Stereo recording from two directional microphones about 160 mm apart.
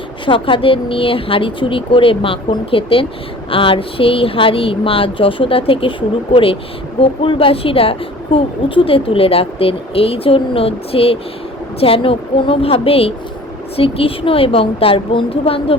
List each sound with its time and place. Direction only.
0.3 s speech: 30° left (ahead or behind)